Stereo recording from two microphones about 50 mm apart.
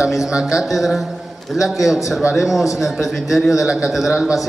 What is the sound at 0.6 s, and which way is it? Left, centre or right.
A man's voice, centre.